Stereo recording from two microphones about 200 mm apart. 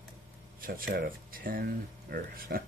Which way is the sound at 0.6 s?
45° right (ahead or behind).